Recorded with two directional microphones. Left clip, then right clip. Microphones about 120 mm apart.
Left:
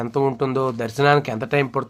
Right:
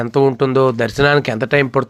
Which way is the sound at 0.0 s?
25° right (ahead or behind).